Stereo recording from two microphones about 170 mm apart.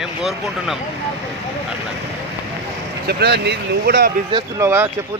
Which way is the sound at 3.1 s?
75° right (ahead or behind).